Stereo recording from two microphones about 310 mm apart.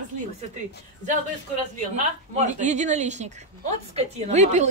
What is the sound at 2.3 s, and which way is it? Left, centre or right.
A woman's voice, right.